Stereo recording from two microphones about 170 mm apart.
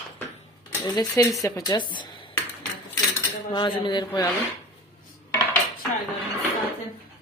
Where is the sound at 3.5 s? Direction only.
30° left (ahead or behind).